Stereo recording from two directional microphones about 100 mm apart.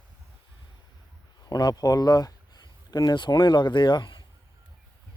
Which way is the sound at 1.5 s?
40° left (ahead or behind).